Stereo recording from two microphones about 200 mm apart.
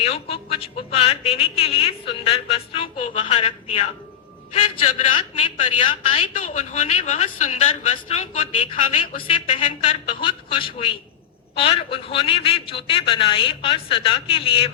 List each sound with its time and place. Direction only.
0.0 s a woman's voice: 30° left (ahead or behind)
6.2 s a woman's voice: 40° left (ahead or behind)